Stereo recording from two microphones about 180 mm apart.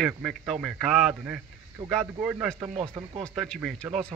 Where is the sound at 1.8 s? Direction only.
25° right (ahead or behind).